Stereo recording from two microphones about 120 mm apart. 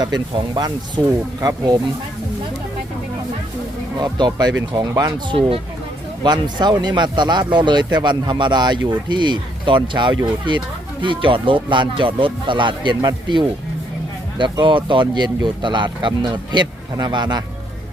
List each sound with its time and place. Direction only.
0.0 s speech: 35° right (ahead or behind)
3.9 s speech: 35° right (ahead or behind)